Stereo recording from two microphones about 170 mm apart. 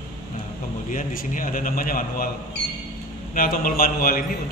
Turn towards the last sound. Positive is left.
turn(degrees=60)  # may be behind; listen again after turning